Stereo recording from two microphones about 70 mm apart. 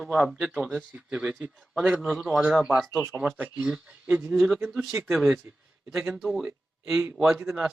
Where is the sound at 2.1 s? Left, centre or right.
Centre.